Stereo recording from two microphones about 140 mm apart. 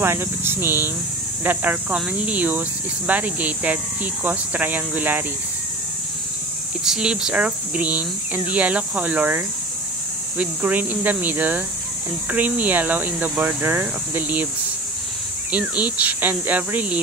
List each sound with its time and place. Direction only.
0.0 s speech: 15° right (ahead or behind)
6.8 s speech: 5° right (ahead or behind)
15.5 s speech: 10° right (ahead or behind)